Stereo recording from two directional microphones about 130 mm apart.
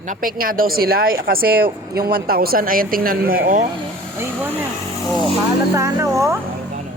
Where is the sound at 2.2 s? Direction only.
90° right.